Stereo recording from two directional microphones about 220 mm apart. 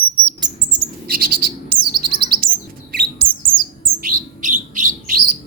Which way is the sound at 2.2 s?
40° right (ahead or behind).